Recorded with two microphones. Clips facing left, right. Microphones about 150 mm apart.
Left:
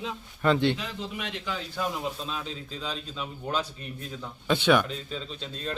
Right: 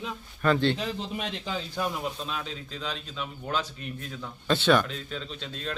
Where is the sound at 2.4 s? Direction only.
35° left (ahead or behind).